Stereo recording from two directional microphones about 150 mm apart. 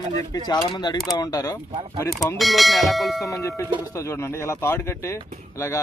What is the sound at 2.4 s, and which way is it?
Speech, centre (ahead or behind).